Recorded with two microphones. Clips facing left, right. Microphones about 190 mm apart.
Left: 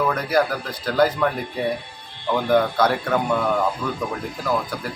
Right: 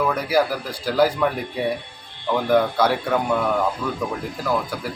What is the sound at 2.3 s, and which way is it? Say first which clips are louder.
Speech: even; centre (ahead or behind).